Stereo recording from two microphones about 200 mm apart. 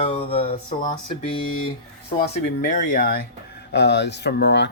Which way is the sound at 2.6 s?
40° left (ahead or behind).